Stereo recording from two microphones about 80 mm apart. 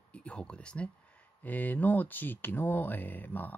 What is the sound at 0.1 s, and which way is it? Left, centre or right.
Speech, centre.